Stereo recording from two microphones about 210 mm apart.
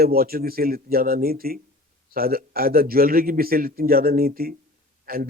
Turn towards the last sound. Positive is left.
turn(degrees=-45)  # may be behind; listen again after turning